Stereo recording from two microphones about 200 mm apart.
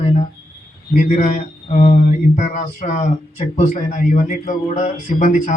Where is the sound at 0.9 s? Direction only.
40° left (ahead or behind).